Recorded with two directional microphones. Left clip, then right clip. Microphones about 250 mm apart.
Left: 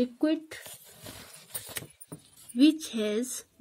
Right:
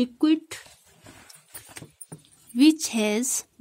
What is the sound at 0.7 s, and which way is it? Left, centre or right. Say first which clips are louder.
Dishes: left 4 dB; left.